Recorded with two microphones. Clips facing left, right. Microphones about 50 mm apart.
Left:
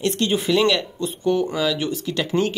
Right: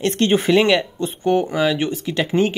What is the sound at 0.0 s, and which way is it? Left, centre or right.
Speech, right.